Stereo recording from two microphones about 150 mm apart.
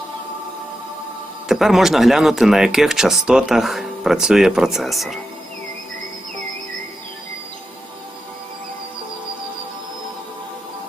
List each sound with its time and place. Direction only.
1.5 s speech: centre (ahead or behind)